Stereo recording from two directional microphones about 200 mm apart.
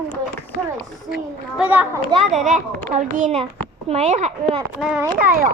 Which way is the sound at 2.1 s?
35° right (ahead or behind).